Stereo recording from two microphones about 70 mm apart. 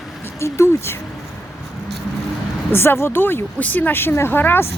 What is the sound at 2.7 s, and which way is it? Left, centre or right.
Speech, left.